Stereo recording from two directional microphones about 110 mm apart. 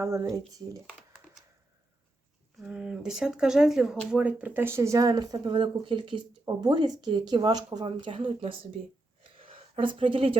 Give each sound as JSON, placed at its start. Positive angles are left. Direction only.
{"t": 0.0, "sound": "a woman's voice", "side_deg": -30}
{"t": 2.6, "sound": "a woman's voice", "side_deg": -5}
{"t": 7.9, "sound": "speech", "side_deg": -50}
{"t": 9.3, "sound": "a sound", "side_deg": -55}